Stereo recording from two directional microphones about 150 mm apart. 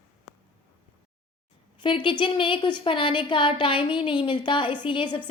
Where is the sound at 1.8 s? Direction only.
35° left (ahead or behind).